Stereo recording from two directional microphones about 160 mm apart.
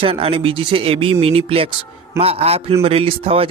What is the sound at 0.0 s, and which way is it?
Speech, 35° right (ahead or behind).